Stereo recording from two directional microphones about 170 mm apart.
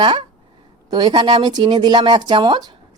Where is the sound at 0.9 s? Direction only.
25° right (ahead or behind).